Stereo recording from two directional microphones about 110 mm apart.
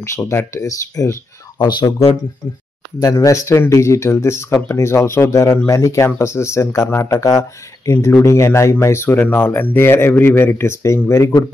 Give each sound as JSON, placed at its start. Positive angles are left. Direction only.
{"t": 0.0, "sound": "speech", "side_deg": 25}
{"t": 1.6, "sound": "speech", "side_deg": 40}
{"t": 3.0, "sound": "speech", "side_deg": 30}